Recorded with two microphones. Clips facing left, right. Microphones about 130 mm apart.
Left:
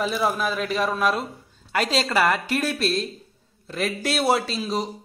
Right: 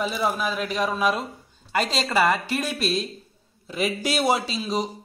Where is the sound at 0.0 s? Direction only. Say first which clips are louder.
Left 1 dB; centre (ahead or behind).